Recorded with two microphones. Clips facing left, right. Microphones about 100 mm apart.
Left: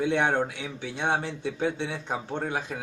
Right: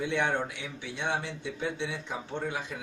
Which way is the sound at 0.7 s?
50° left (ahead or behind).